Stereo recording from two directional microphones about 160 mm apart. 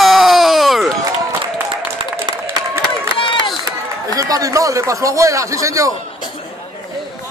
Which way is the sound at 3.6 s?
20° right (ahead or behind).